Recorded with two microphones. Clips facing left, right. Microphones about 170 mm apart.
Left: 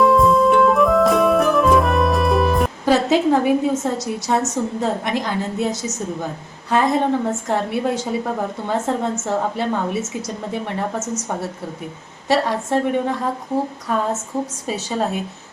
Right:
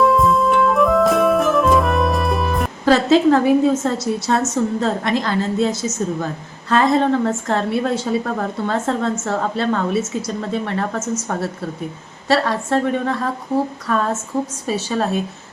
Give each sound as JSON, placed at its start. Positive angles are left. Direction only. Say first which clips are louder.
{"t": 0.0, "sound": "music", "louder": "left 1 dB", "side_deg": 0}
{"t": 2.8, "sound": "a woman's voice", "louder": "right 4 dB", "side_deg": 15}
{"t": 12.3, "sound": "a woman's voice", "louder": "right 1 dB", "side_deg": 15}